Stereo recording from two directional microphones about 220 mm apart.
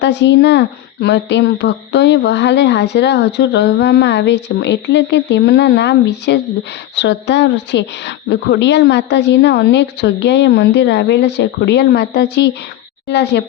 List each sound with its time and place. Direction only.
0.0 s a woman's voice: 55° left (ahead or behind)